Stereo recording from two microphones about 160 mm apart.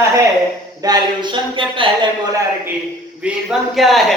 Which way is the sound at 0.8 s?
25° right (ahead or behind).